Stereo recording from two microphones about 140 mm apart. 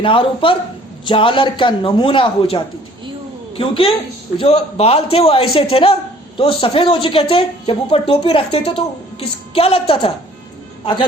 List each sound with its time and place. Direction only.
0.0 s a woman's voice: 40° left (ahead or behind)